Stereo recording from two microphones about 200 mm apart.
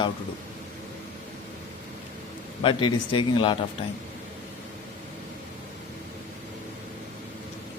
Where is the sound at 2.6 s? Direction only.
25° left (ahead or behind).